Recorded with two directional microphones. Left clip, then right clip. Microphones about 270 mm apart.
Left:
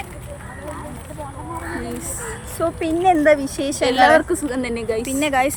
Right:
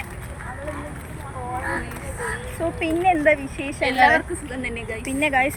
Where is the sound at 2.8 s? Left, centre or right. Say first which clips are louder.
Left 2 dB; centre.